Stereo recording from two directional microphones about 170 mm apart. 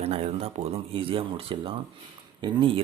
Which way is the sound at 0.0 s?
35° right (ahead or behind).